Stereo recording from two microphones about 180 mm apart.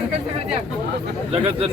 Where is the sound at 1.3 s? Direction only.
30° right (ahead or behind).